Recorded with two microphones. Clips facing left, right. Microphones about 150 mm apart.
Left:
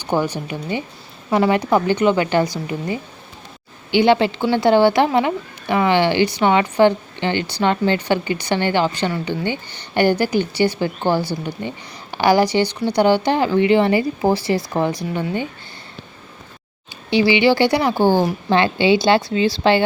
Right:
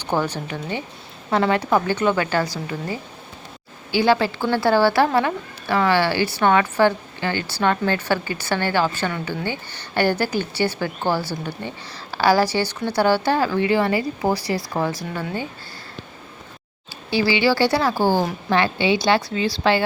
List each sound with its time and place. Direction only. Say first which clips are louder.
0.1 s a woman's voice: left 3 dB; 15° left (ahead or behind)
17.1 s a woman's voice: left 4 dB; 20° left (ahead or behind)